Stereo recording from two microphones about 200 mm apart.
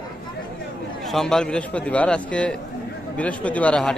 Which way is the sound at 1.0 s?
Centre (ahead or behind).